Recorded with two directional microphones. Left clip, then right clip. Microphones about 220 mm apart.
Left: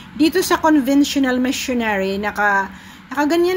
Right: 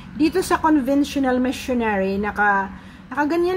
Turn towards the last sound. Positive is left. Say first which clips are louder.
# left 3 dB
turn(degrees=15)  # may be behind; listen again after turning